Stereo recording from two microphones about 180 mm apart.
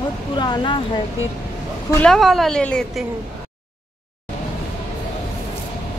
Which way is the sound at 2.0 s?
Centre (ahead or behind).